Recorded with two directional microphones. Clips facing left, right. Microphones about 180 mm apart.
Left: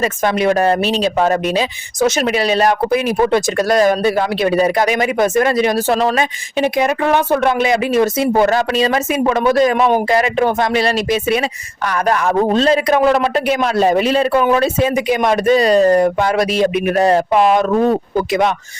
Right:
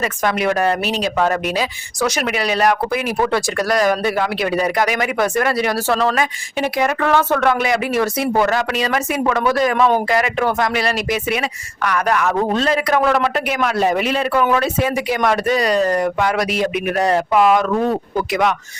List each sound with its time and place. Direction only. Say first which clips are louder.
0.0 s speech: left 3 dB; 25° left (ahead or behind)